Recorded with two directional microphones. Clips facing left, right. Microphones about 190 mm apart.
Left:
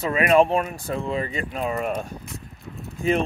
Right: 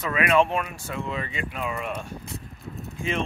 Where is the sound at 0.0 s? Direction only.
35° left (ahead or behind).